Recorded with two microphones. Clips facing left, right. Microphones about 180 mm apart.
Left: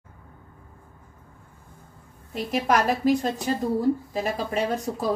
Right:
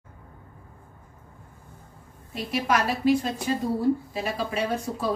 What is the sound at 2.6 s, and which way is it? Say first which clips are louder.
Speech: left 1 dB; 45° left (ahead or behind).